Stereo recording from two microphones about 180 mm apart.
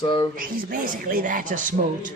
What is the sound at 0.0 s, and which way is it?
Speech, 25° left (ahead or behind).